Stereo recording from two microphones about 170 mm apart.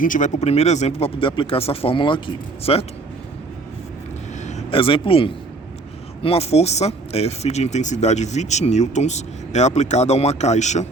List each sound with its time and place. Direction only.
0.0 s speech: 50° left (ahead or behind); by 2.8 s 30° left (ahead or behind)
4.4 s speech: 35° left (ahead or behind)